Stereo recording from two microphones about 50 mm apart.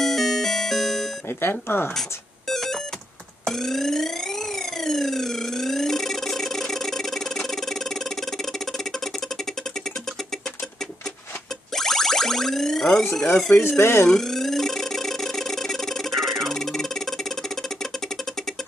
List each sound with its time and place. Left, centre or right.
0.0 s music: centre
1.4 s speech: left
2.0 s music: centre
3.4 s a sound: centre
11.7 s boing: centre
13.1 s police car: centre
13.7 s speech: left
14.0 s a sound: centre